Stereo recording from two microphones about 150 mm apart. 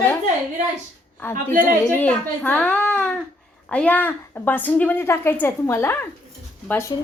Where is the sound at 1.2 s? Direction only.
15° left (ahead or behind).